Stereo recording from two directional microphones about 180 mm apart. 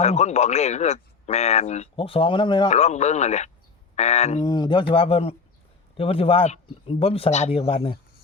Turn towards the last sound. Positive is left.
turn(degrees=30)  # may be behind; listen again after turning